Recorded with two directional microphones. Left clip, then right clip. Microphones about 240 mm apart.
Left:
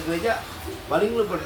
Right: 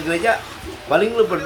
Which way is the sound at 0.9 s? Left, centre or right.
Right.